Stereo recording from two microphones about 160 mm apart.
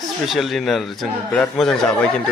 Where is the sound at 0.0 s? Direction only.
Centre (ahead or behind).